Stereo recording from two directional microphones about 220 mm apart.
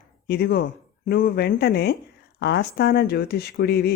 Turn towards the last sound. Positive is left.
turn(degrees=45)  # may be behind; listen again after turning